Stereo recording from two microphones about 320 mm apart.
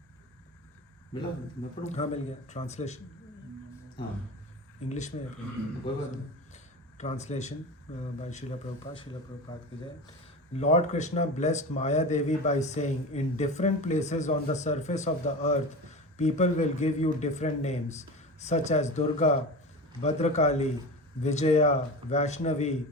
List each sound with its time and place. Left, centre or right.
1.8 s speech: left
4.9 s a man's voice: left
10.5 s speech: left